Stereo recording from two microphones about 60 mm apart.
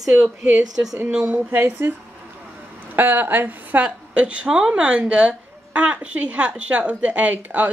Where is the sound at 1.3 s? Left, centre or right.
Right.